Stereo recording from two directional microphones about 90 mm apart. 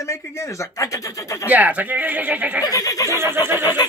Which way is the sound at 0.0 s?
35° left (ahead or behind).